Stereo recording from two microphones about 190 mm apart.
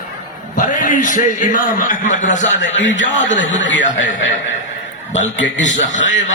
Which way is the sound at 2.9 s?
75° left (ahead or behind).